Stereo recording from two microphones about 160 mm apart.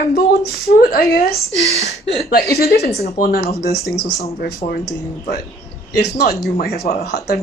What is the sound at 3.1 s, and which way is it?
Speech, 65° left (ahead or behind).